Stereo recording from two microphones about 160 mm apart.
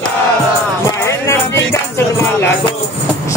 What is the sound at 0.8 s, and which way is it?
Music, 15° left (ahead or behind).